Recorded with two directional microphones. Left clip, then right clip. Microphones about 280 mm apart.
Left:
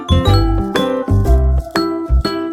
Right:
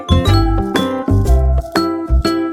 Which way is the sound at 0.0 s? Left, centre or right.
Centre.